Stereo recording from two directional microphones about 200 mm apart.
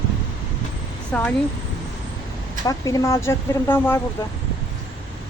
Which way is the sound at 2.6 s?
15° left (ahead or behind).